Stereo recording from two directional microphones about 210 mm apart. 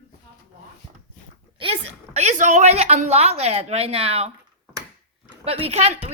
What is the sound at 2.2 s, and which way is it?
A woman's voice, 35° right (ahead or behind).